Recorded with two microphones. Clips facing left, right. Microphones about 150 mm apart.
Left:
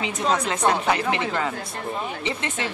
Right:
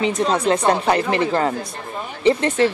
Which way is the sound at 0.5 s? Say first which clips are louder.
Right 5 dB; 40° right (ahead or behind).